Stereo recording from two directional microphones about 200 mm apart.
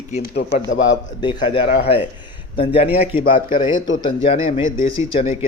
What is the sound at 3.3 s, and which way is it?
A man's voice, 40° left (ahead or behind).